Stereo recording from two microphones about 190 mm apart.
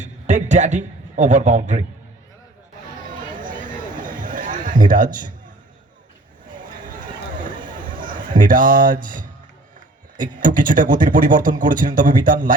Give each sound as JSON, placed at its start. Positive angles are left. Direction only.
{"t": 0.0, "sound": "a man's voice", "side_deg": -40}
{"t": 4.0, "sound": "music", "side_deg": -45}
{"t": 7.3, "sound": "a sound", "side_deg": -45}
{"t": 10.2, "sound": "speech", "side_deg": -45}